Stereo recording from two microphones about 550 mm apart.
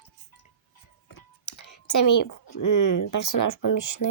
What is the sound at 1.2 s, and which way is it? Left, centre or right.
Whispering, left.